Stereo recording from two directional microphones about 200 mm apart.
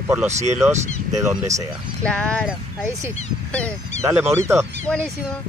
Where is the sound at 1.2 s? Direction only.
15° right (ahead or behind).